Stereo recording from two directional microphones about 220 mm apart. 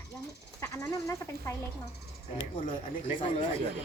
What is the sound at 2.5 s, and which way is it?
Speech, 35° left (ahead or behind).